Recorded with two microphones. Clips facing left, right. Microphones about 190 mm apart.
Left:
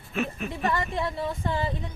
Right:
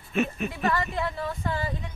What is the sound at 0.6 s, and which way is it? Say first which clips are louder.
Speech: even; 25° left (ahead or behind).